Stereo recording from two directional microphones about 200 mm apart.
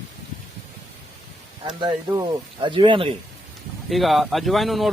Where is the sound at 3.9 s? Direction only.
Centre (ahead or behind).